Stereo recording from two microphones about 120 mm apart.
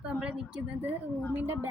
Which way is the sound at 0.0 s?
10° right (ahead or behind).